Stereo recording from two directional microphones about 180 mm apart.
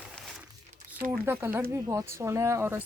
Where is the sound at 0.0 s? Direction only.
Centre (ahead or behind).